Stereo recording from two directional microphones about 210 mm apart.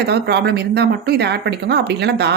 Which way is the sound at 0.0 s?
50° right (ahead or behind).